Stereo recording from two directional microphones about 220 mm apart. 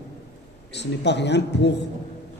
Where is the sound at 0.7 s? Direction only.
50° left (ahead or behind).